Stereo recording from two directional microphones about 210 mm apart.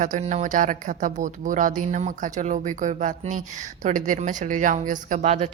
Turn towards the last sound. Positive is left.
turn(degrees=-35)  # may be behind; listen again after turning